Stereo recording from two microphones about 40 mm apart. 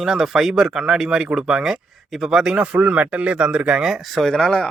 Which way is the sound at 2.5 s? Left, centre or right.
Right.